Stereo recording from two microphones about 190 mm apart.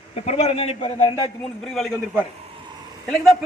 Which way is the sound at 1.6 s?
Centre (ahead or behind).